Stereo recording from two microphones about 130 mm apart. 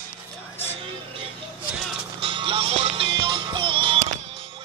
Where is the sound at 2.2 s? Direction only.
40° right (ahead or behind).